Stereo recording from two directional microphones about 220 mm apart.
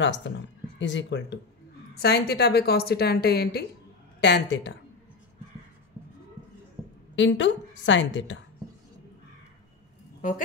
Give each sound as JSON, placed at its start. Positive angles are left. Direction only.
{"t": 0.0, "sound": "a woman's voice", "side_deg": 55}
{"t": 6.8, "sound": "a sound", "side_deg": -10}
{"t": 7.2, "sound": "a woman's voice", "side_deg": 55}